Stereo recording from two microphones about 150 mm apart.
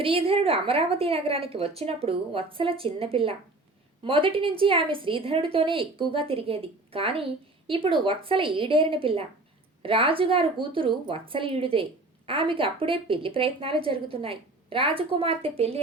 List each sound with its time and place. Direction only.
0.0 s a woman's voice: 40° right (ahead or behind)